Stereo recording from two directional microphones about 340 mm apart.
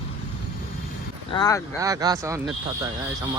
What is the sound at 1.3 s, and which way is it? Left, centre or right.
Speech, centre.